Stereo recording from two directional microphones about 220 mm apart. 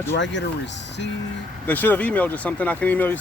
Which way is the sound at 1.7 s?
10° left (ahead or behind).